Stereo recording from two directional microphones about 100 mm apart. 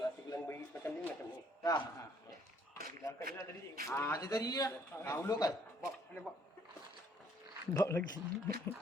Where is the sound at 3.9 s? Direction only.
25° left (ahead or behind).